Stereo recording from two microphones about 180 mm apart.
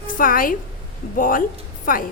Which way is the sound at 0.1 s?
50° left (ahead or behind).